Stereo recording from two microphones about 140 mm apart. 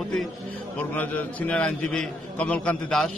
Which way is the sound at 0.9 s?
10° left (ahead or behind).